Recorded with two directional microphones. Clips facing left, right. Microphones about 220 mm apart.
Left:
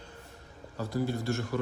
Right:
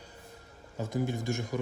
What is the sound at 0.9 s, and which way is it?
Speech, 20° right (ahead or behind).